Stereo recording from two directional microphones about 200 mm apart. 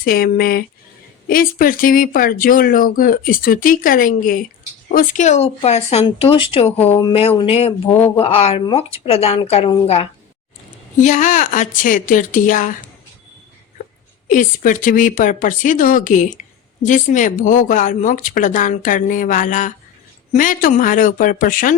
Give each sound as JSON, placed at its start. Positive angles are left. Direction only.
{"t": 0.0, "sound": "speech", "side_deg": 45}
{"t": 14.3, "sound": "speech", "side_deg": 40}